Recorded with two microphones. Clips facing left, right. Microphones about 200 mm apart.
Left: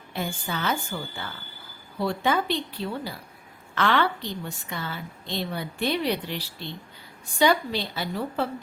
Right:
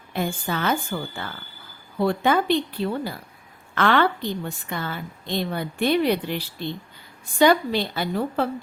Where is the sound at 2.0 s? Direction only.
55° right (ahead or behind).